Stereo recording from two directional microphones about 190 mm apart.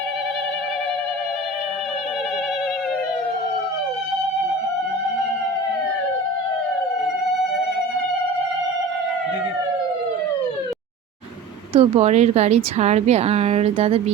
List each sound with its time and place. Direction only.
11.7 s a woman's voice: 30° right (ahead or behind)